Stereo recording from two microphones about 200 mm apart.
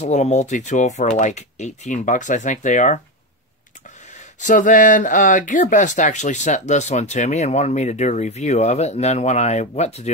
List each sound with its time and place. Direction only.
0.0 s speech: 35° left (ahead or behind)
4.4 s speech: 40° left (ahead or behind)